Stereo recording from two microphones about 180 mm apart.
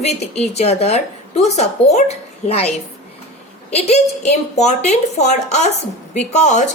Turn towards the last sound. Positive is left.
turn(degrees=40)  # may be behind; listen again after turning